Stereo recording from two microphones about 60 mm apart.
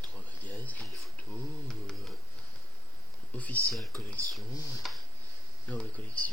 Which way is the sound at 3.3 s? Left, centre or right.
Left.